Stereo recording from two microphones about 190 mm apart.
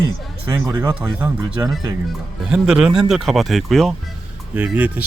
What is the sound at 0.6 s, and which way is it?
Speech, 15° right (ahead or behind).